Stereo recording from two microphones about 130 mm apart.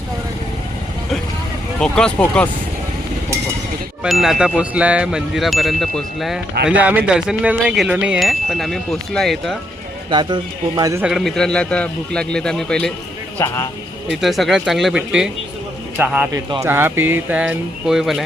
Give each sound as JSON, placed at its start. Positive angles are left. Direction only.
{"t": 1.8, "sound": "speech", "side_deg": 5}
{"t": 4.0, "sound": "chime", "side_deg": -5}
{"t": 10.1, "sound": "a man's voice", "side_deg": -35}
{"t": 11.0, "sound": "chime", "side_deg": 0}
{"t": 13.4, "sound": "speech", "side_deg": 25}
{"t": 14.1, "sound": "chime", "side_deg": 0}
{"t": 16.0, "sound": "speech", "side_deg": -10}
{"t": 16.3, "sound": "speech", "side_deg": -25}